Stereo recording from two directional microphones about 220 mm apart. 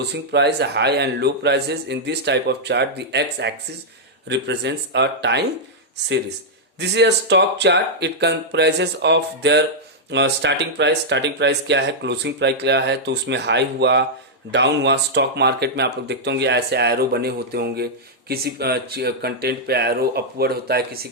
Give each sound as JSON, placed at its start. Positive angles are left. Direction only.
{"t": 0.1, "sound": "speech", "side_deg": -50}
{"t": 6.7, "sound": "speech", "side_deg": -50}